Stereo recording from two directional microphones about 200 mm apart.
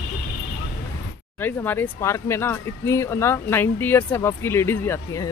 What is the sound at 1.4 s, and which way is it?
Speech, 10° left (ahead or behind).